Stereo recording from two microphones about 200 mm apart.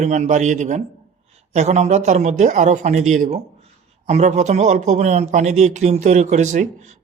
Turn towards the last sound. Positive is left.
turn(degrees=-35)  # may be behind; listen again after turning